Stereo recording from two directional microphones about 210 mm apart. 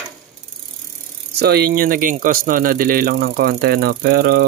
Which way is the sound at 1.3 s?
50° right (ahead or behind).